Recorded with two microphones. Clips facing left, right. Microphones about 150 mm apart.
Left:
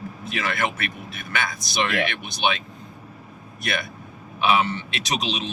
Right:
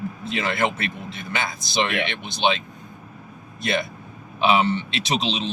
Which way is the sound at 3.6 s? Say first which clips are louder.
Right 4 dB; 25° right (ahead or behind).